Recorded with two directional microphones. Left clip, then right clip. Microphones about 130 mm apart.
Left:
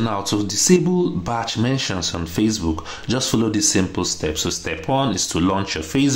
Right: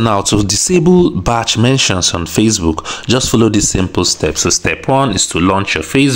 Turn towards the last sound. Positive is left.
turn(degrees=-40)  # may be behind; listen again after turning